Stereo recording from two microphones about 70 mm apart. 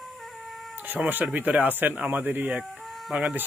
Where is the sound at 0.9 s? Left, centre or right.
Centre.